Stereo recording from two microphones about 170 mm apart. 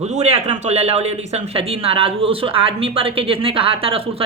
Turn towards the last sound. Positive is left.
turn(degrees=-35)  # may be behind; listen again after turning